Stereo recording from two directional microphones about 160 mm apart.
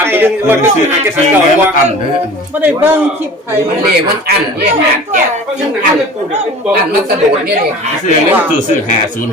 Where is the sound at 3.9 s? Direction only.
85° right.